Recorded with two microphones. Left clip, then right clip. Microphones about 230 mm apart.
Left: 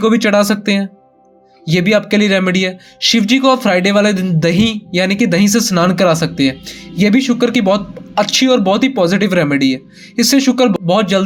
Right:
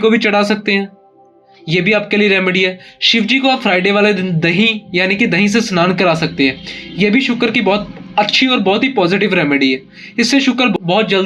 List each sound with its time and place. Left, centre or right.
0.0 s speech: left